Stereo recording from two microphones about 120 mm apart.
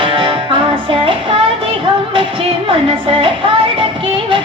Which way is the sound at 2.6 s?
45° right (ahead or behind).